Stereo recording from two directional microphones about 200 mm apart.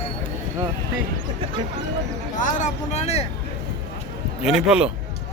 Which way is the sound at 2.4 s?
40° left (ahead or behind).